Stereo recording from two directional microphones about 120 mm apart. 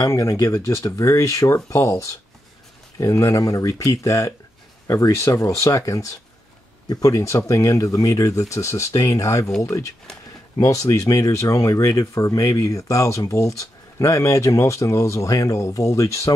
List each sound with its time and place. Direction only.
0.0 s speech: 30° left (ahead or behind)